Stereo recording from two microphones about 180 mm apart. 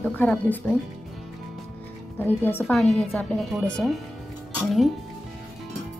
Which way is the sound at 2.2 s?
10° left (ahead or behind).